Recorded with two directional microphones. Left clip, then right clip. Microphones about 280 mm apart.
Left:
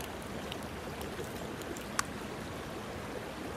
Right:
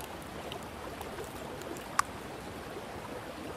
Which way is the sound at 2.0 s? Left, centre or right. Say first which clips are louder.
Right 5 dB; centre.